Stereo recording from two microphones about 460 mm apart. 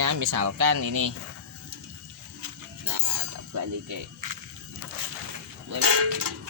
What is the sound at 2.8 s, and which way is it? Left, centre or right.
Music, right.